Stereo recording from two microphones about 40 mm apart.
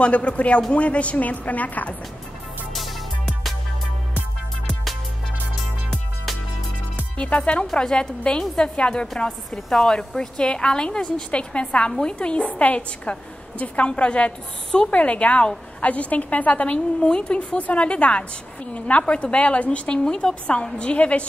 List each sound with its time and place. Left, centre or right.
0.0 s a woman's voice: left
2.7 s music: centre
7.2 s a woman's voice: left
7.8 s a woman's voice: centre
9.5 s a woman's voice: centre
9.9 s a woman's voice: left